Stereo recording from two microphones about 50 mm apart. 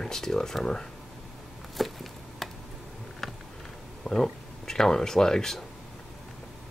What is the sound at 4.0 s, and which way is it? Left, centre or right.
Speech, centre.